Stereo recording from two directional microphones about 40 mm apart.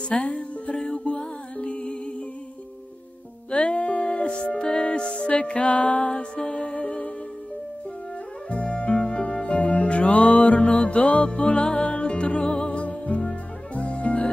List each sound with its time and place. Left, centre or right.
0.2 s music: left
3.5 s music: left
8.5 s music: left